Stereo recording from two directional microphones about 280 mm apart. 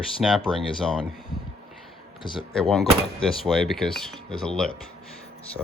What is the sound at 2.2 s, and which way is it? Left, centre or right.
Speech, centre.